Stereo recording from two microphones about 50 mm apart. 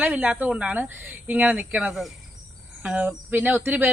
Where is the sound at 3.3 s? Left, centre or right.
Right.